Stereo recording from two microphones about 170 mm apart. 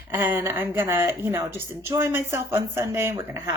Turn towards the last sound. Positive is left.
turn(degrees=-20)  # may be behind; listen again after turning